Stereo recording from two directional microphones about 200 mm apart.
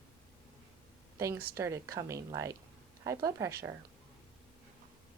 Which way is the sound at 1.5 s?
15° right (ahead or behind).